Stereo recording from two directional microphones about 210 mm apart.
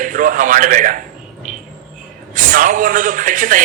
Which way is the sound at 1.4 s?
40° right (ahead or behind).